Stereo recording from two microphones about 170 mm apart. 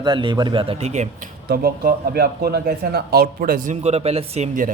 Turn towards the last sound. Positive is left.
turn(degrees=-40)  # may be behind; listen again after turning